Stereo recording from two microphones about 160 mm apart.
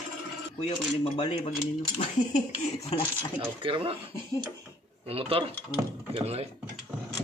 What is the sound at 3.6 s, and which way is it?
Speech, 35° right (ahead or behind).